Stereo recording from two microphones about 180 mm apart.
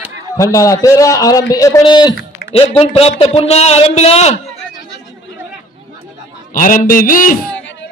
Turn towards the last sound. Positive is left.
turn(degrees=50)  # may be behind; listen again after turning